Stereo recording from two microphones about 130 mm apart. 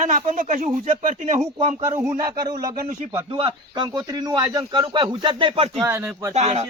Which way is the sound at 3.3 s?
40° right (ahead or behind).